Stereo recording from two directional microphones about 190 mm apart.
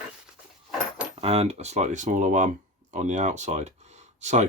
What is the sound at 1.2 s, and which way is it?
Speech, 35° right (ahead or behind).